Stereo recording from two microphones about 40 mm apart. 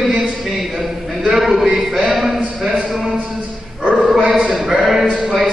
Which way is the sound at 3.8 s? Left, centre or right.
Right.